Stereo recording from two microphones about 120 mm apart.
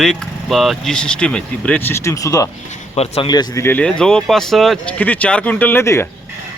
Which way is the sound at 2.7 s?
60° left (ahead or behind).